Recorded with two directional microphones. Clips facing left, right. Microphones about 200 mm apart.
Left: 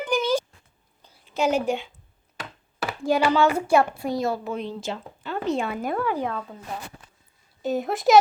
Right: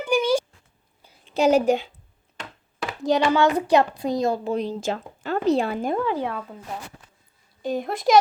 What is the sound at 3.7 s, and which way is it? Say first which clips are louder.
A woman's voice: right 1 dB; 20° right (ahead or behind).